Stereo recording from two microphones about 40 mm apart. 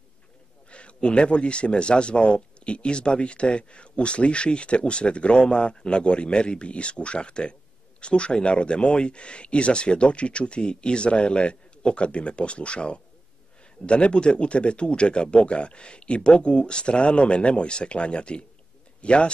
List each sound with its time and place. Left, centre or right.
0.7 s speech: left